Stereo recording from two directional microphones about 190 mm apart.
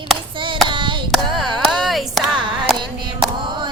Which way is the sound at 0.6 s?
25° right (ahead or behind).